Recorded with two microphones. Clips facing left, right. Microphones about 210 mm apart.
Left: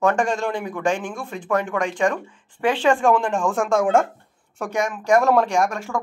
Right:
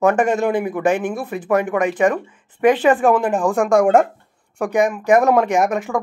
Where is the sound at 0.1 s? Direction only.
5° right (ahead or behind).